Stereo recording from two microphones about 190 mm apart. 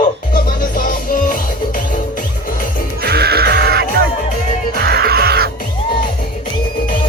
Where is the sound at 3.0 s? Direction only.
55° right (ahead or behind).